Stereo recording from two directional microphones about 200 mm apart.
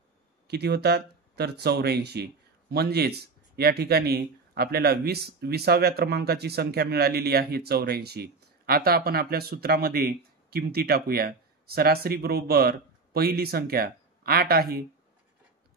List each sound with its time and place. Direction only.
0.5 s speech: 55° right (ahead or behind)